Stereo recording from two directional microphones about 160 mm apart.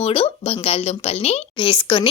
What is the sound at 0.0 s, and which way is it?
A woman's voice, 35° left (ahead or behind).